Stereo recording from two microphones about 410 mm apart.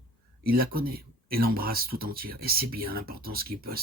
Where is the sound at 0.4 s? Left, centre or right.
Right.